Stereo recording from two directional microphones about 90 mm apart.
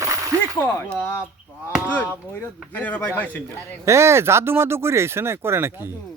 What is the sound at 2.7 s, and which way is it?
Speech, 15° left (ahead or behind).